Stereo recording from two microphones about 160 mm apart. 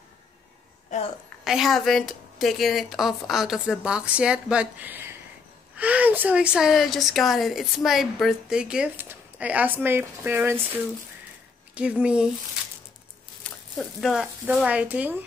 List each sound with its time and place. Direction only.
0.9 s a sound: 45° left (ahead or behind)
1.4 s a woman's voice: centre (ahead or behind)
11.7 s speech: 5° right (ahead or behind)
13.4 s speech: centre (ahead or behind)